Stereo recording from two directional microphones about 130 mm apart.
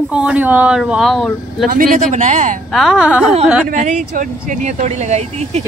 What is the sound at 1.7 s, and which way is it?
Speech, 90° right.